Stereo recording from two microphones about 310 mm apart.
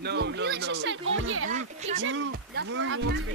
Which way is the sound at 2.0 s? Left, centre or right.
Right.